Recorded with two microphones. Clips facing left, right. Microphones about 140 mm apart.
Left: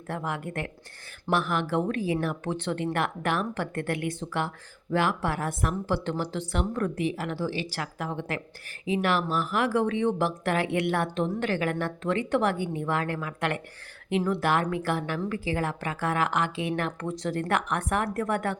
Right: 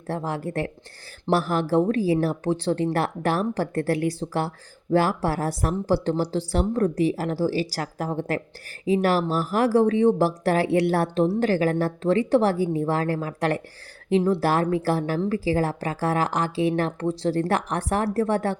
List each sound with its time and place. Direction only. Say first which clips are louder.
0.1 s speech: right 5 dB; 30° right (ahead or behind)